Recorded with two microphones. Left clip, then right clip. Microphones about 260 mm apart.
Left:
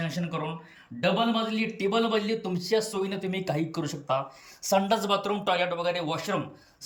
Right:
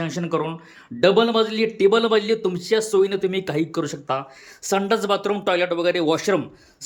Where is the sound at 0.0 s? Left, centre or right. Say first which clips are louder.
Right 8 dB; centre.